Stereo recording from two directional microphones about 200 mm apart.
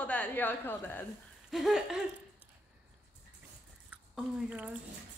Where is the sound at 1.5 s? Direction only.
Centre (ahead or behind).